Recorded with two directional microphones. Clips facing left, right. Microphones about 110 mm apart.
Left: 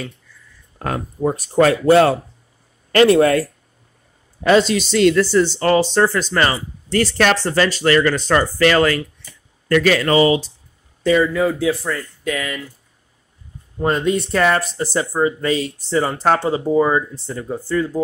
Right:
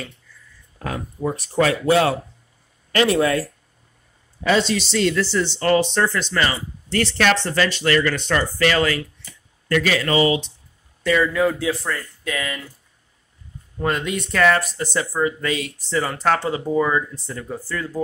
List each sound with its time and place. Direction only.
0.7 s speech: 45° left (ahead or behind)
11.3 s speech: 10° left (ahead or behind)
13.8 s speech: 35° left (ahead or behind)